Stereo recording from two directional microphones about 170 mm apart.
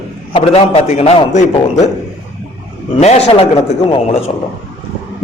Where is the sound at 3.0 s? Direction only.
40° left (ahead or behind).